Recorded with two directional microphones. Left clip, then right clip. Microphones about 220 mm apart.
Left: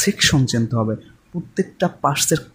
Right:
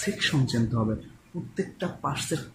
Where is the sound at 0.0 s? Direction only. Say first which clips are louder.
Left 10 dB; 50° left (ahead or behind).